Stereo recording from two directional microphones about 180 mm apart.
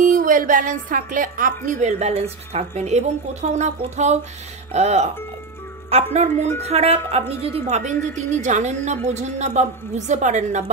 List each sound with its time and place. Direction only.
0.0 s a woman's voice: 50° right (ahead or behind)